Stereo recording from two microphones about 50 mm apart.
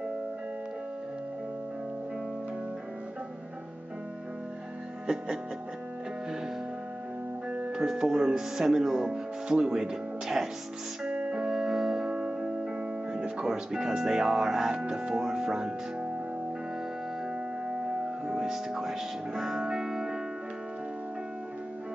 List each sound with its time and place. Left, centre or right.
5.0 s music: centre
7.7 s speech: centre
11.1 s music: right
11.5 s music: centre
13.5 s speech: centre
17.6 s music: centre